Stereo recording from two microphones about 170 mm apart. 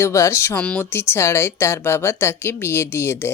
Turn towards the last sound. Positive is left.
turn(degrees=15)  # may be behind; listen again after turning